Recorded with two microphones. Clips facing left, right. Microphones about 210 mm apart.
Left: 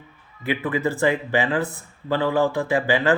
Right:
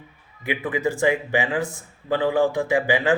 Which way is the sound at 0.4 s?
15° right (ahead or behind).